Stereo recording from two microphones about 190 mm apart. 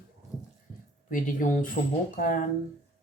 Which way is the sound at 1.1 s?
40° left (ahead or behind).